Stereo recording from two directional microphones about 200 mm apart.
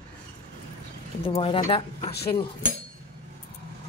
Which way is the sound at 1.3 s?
30° left (ahead or behind).